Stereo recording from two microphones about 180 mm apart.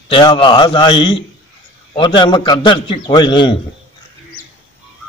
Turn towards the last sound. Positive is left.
turn(degrees=25)  # may be behind; listen again after turning